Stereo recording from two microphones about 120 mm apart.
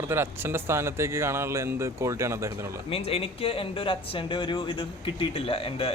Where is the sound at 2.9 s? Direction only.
55° left (ahead or behind).